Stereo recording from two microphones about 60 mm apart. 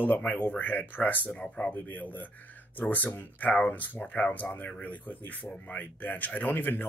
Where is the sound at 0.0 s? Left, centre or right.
Left.